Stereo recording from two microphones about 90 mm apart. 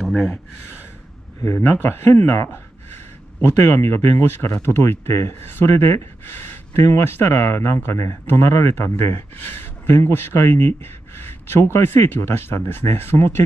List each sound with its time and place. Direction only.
0.0 s speech: centre (ahead or behind)
1.4 s speech: 25° left (ahead or behind)